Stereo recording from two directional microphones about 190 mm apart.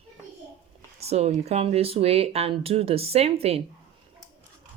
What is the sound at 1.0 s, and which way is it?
Speech, 35° right (ahead or behind).